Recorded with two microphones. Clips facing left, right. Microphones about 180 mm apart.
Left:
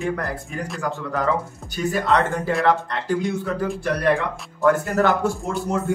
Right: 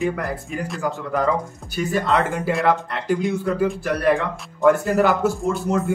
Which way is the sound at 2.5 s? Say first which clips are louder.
Left 1 dB; 5° right (ahead or behind).